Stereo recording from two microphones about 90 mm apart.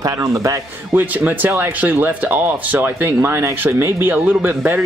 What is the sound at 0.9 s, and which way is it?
Speech, 20° right (ahead or behind).